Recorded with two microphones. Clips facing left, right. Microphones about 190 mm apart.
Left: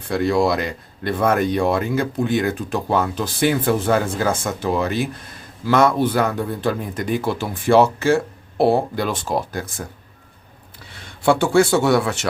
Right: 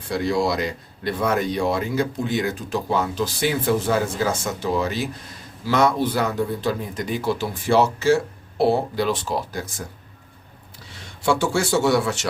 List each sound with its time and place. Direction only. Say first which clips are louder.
0.1 s a man's voice: left 4 dB; 55° left (ahead or behind)
10.8 s a man's voice: left 4 dB; 55° left (ahead or behind)